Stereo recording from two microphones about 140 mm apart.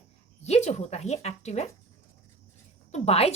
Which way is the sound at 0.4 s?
50° left (ahead or behind).